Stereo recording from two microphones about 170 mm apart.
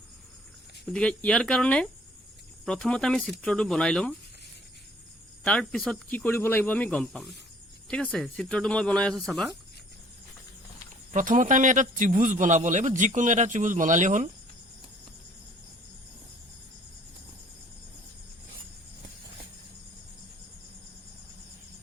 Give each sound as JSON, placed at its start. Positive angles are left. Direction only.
{"t": 0.9, "sound": "speech", "side_deg": 5}
{"t": 5.4, "sound": "speech", "side_deg": 5}
{"t": 11.1, "sound": "a man's voice", "side_deg": -50}